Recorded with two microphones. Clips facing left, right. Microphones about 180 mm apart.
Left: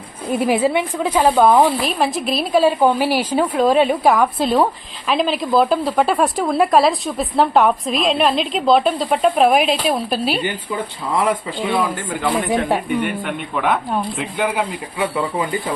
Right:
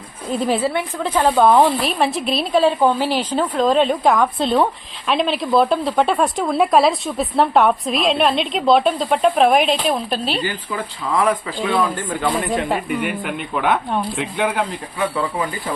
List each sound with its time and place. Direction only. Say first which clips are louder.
0.3 s a woman's voice: left 3 dB; 10° left (ahead or behind)
11.3 s speech: even; 15° left (ahead or behind)
11.8 s a woman's voice: right 1 dB; 5° left (ahead or behind)